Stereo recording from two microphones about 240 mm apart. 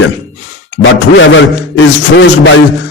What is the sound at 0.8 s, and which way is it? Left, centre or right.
A man's voice, left.